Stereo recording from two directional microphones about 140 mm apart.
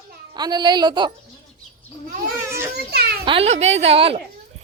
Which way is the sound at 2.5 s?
15° right (ahead or behind).